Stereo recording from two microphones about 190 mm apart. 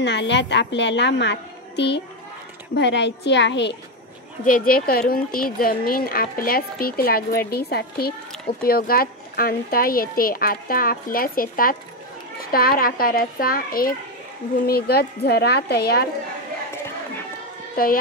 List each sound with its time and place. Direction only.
0.0 s a woman's voice: 65° left (ahead or behind)
4.5 s a woman's voice: 45° left (ahead or behind)
17.8 s speech: 50° left (ahead or behind)